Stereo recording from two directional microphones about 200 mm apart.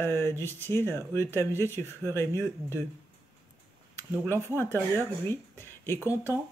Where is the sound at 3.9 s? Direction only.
10° left (ahead or behind).